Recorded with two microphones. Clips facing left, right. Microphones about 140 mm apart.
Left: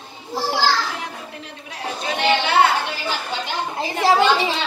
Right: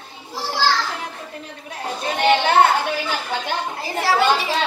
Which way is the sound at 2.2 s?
45° right (ahead or behind).